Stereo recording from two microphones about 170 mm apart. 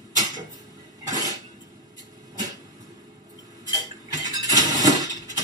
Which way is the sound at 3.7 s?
20° right (ahead or behind).